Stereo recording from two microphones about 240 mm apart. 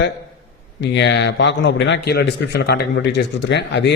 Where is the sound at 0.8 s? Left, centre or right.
Left.